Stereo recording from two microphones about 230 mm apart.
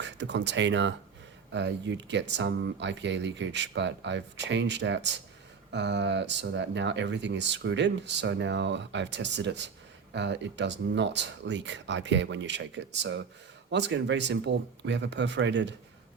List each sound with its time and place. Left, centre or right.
0.0 s speech: right